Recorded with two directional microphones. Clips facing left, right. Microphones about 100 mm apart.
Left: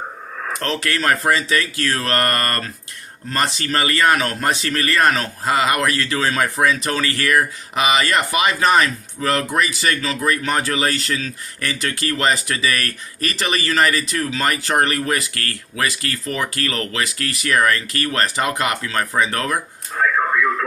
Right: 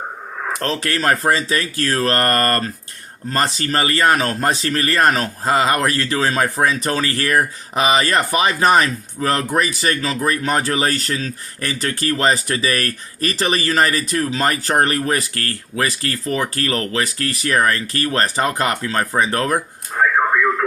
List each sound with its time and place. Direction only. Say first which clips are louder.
0.6 s speech: right 1 dB; 35° right (ahead or behind)